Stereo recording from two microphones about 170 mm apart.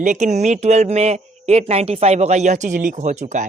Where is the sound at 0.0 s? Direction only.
45° right (ahead or behind).